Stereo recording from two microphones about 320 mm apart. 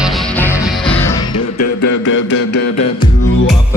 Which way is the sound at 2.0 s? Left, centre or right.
Left.